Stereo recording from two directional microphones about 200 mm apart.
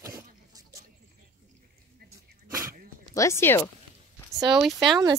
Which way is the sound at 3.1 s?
15° left (ahead or behind).